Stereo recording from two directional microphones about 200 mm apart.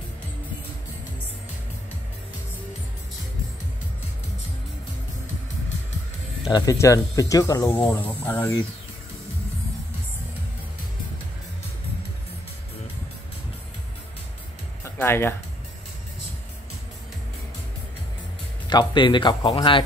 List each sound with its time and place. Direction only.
6.5 s speech: 15° left (ahead or behind)
14.8 s music: 10° left (ahead or behind)
18.7 s speech: 20° left (ahead or behind)